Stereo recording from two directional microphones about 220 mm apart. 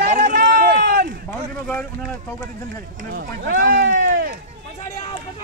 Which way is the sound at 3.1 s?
40° right (ahead or behind).